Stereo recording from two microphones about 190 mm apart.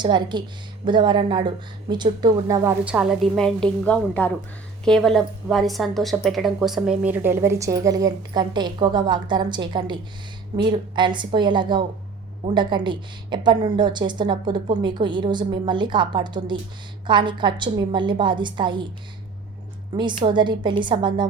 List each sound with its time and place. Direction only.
0.0 s a woman's voice: 25° right (ahead or behind)
2.8 s a woman's voice: 5° right (ahead or behind); by 18.9 s 25° right (ahead or behind)
20.0 s a woman's voice: 25° right (ahead or behind)